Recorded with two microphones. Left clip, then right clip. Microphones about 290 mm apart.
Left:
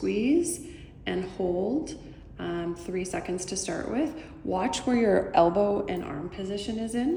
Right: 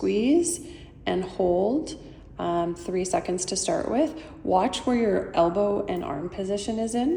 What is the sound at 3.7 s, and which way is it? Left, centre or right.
Speech, right.